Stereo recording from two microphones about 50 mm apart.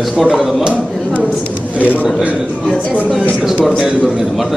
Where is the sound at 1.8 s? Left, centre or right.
Left.